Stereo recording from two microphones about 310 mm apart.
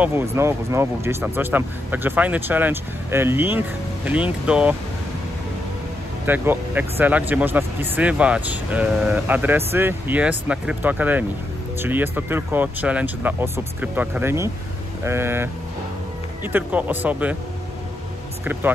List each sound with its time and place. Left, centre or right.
0.0 s speech: centre
6.2 s speech: centre
16.5 s speech: centre
18.4 s speech: centre